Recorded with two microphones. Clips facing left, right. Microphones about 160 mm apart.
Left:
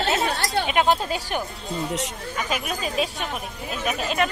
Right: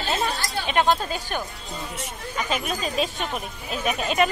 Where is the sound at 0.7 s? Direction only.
10° left (ahead or behind).